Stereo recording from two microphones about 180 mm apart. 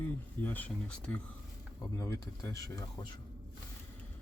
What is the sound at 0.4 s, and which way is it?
Speech, 10° left (ahead or behind).